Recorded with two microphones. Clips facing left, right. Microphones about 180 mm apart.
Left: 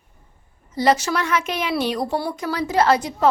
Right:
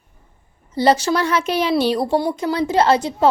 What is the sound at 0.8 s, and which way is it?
A woman's voice, 30° right (ahead or behind).